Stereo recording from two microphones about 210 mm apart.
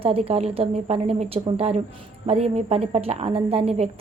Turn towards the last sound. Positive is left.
turn(degrees=-30)  # may be behind; listen again after turning